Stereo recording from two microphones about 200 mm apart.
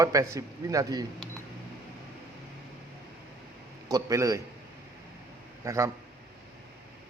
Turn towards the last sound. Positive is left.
turn(degrees=-15)  # may be behind; listen again after turning